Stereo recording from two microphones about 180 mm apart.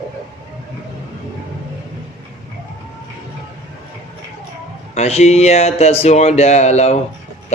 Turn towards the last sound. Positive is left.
turn(degrees=40)  # may be behind; listen again after turning